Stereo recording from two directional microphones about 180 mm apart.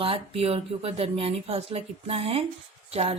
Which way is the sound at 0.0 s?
30° right (ahead or behind).